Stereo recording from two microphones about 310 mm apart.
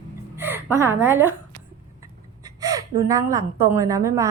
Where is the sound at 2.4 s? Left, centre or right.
Centre.